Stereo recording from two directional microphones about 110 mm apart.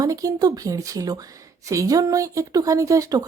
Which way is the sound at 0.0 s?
35° right (ahead or behind).